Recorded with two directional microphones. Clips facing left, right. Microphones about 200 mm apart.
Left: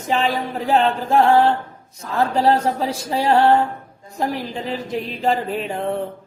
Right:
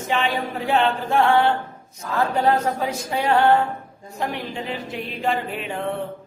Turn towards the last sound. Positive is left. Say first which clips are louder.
# left 4 dB
turn(degrees=35)  # may be behind; listen again after turning